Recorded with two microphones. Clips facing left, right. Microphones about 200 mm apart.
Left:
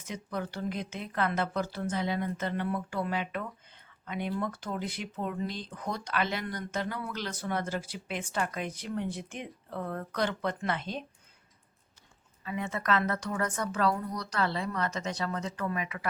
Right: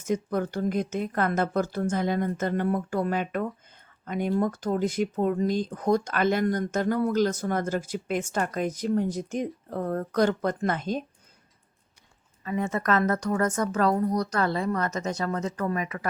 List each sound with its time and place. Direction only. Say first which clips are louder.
0.0 s speech: right 9 dB; 45° right (ahead or behind)
12.5 s speech: right 5 dB; 45° right (ahead or behind)